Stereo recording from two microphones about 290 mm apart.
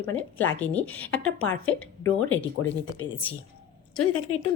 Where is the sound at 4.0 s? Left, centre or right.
Left.